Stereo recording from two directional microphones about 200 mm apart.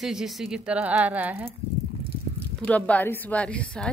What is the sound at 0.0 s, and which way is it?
Speech, centre (ahead or behind).